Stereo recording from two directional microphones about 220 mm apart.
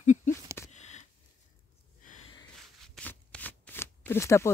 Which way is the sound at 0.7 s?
30° left (ahead or behind).